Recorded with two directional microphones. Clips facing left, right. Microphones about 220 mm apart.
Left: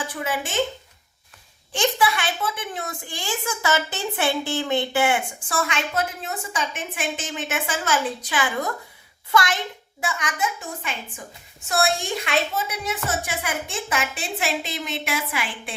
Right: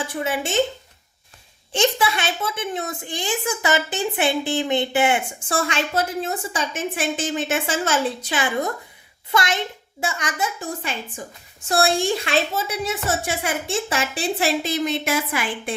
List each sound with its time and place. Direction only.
0.1 s a woman's voice: 25° right (ahead or behind)
1.7 s a woman's voice: 25° right (ahead or behind)
11.7 s a woman's voice: 30° right (ahead or behind)